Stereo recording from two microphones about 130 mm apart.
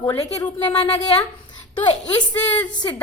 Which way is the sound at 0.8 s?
50° left (ahead or behind).